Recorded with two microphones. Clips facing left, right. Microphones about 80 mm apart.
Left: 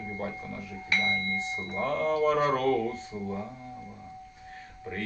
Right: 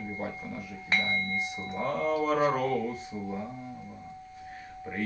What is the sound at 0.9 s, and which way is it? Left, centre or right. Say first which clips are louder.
Speech: even; right.